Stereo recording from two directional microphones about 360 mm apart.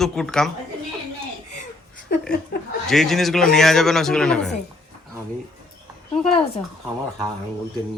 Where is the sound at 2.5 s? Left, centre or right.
Left.